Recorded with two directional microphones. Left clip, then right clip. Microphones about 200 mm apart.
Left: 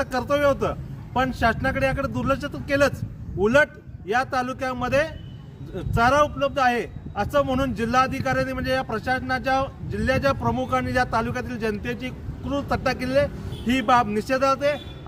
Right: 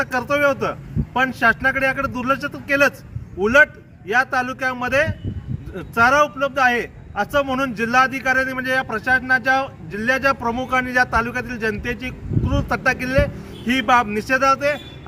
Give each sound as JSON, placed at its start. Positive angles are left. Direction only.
{"t": 0.0, "sound": "speech", "side_deg": 5}